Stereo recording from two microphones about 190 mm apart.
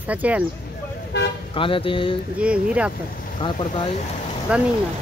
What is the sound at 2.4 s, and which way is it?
Speech, 5° right (ahead or behind).